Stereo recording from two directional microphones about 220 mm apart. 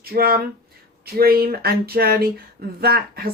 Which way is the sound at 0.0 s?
45° right (ahead or behind).